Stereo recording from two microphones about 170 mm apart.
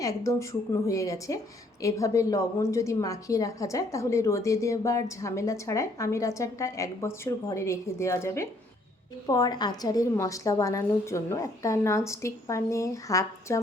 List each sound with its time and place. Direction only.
0.0 s a woman's voice: 20° left (ahead or behind)